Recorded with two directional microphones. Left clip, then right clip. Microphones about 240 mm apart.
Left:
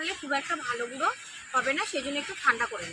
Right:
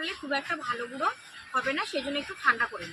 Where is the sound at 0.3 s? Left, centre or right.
Centre.